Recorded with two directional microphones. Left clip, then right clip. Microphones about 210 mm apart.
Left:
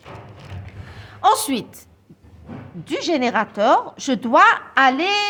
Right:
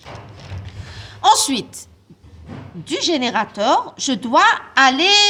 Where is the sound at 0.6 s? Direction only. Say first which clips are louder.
Right 4 dB; 25° left (ahead or behind).